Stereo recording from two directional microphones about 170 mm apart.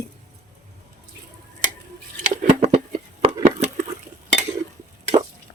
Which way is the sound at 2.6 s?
35° right (ahead or behind).